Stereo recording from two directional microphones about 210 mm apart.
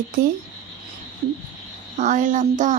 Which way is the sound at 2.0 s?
35° right (ahead or behind).